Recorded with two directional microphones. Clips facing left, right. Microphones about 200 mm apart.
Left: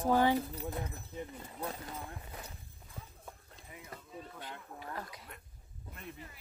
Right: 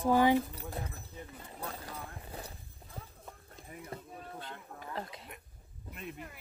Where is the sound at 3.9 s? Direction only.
25° right (ahead or behind).